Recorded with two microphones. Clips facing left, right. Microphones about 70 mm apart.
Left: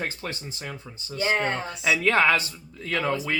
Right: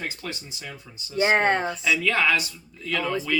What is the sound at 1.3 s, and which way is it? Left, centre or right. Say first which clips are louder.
Speech: right 5 dB; right.